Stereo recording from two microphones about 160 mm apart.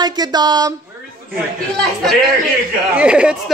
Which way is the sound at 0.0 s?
25° right (ahead or behind).